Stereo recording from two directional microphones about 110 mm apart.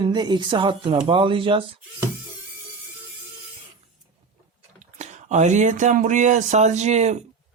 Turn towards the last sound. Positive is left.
turn(degrees=-90)